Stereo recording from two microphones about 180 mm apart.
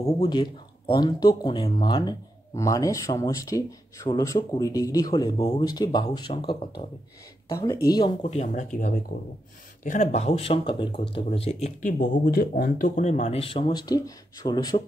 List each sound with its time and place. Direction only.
0.2 s speech: 25° left (ahead or behind)
7.4 s a woman's voice: 15° left (ahead or behind)
8.2 s speech: 40° left (ahead or behind)
11.8 s speech: 50° left (ahead or behind); by 14.8 s 20° left (ahead or behind)